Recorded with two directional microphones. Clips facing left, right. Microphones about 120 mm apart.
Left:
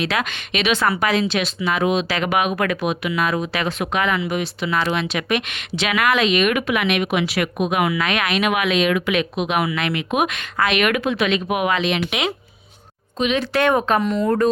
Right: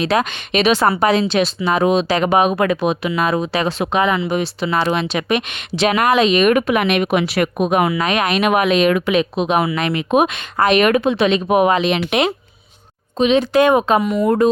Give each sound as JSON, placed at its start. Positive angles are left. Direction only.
{"t": 0.0, "sound": "a woman's voice", "side_deg": -35}
{"t": 13.1, "sound": "speech", "side_deg": -25}
{"t": 13.4, "sound": "speech", "side_deg": -15}